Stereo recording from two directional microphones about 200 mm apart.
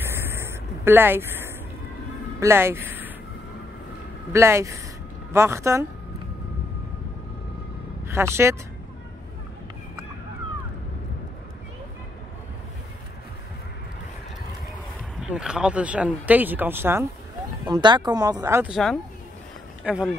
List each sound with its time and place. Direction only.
0.0 s a sound: 10° right (ahead or behind)
2.4 s speech: 10° right (ahead or behind)
4.3 s speech: 15° right (ahead or behind)
8.1 s speech: 15° right (ahead or behind)
15.2 s speech: 5° right (ahead or behind)
17.6 s speech: 20° right (ahead or behind)
18.7 s speech: centre (ahead or behind)